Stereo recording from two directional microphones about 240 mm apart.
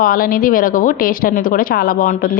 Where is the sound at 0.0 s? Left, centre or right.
Left.